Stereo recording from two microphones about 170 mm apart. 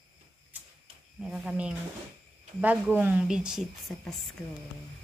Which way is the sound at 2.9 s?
10° right (ahead or behind).